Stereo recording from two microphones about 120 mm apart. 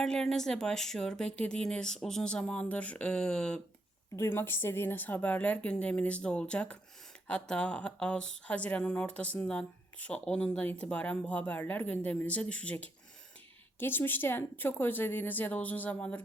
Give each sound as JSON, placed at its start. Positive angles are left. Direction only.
{"t": 0.0, "sound": "speech", "side_deg": 5}
{"t": 4.1, "sound": "speech", "side_deg": 20}